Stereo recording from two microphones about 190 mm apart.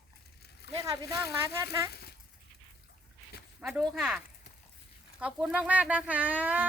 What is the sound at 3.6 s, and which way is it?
Speech, 10° right (ahead or behind).